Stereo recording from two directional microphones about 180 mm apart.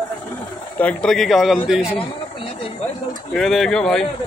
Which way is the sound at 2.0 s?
30° left (ahead or behind).